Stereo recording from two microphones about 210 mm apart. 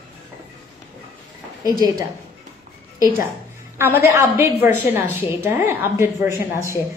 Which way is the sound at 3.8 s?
10° right (ahead or behind).